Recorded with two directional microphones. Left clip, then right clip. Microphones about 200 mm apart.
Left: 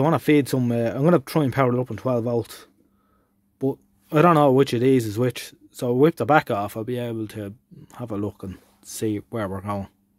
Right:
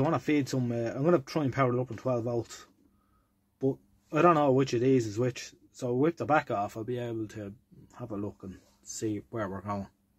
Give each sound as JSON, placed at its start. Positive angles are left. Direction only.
{"t": 0.0, "sound": "speech", "side_deg": 60}